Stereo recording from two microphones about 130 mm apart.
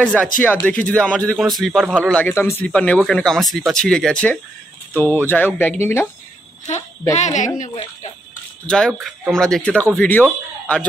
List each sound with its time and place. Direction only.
0.0 s speech: 10° left (ahead or behind)
7.3 s speech: 75° left (ahead or behind)
8.6 s speech: 5° left (ahead or behind)